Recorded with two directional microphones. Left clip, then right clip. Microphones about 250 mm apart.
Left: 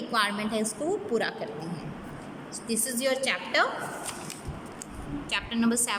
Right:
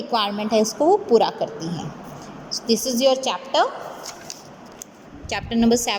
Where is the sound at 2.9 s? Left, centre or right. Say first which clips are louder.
Right 7 dB; centre.